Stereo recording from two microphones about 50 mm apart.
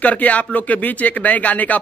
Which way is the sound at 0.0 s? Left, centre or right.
Left.